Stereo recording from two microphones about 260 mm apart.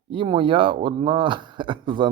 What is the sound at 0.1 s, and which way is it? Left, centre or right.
Speech, centre.